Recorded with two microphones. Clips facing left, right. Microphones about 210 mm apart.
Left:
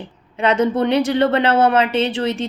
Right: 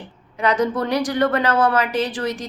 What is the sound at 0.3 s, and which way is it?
A woman's voice, 25° left (ahead or behind).